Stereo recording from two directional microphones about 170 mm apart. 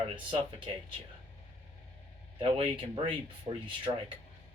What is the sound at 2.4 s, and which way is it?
Speech, 30° right (ahead or behind).